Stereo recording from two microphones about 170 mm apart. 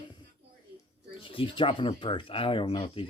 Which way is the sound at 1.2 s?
30° left (ahead or behind).